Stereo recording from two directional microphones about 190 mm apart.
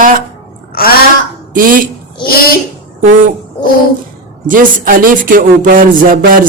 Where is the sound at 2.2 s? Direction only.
50° left (ahead or behind).